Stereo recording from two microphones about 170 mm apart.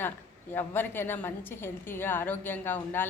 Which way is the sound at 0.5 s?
10° left (ahead or behind).